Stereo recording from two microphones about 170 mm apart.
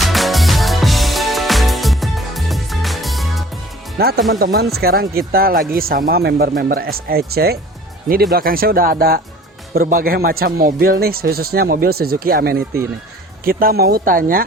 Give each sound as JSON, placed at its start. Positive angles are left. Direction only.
{"t": 0.0, "sound": "music", "side_deg": 0}
{"t": 3.9, "sound": "speech", "side_deg": -65}